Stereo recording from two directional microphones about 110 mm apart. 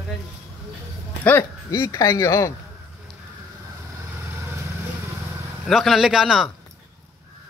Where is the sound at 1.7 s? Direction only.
25° left (ahead or behind).